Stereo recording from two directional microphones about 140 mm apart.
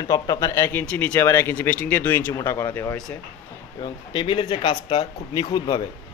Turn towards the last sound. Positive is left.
turn(degrees=30)  # may be behind; listen again after turning